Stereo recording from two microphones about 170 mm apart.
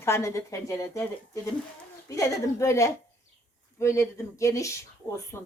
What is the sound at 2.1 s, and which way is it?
Speech, 20° left (ahead or behind).